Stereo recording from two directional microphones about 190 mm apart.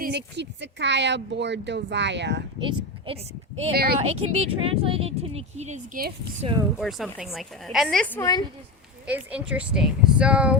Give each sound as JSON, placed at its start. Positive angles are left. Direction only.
{"t": 0.0, "sound": "speech", "side_deg": -60}
{"t": 2.6, "sound": "speech", "side_deg": -30}
{"t": 6.4, "sound": "speech", "side_deg": -30}
{"t": 6.7, "sound": "speech", "side_deg": 0}
{"t": 9.0, "sound": "speech", "side_deg": -5}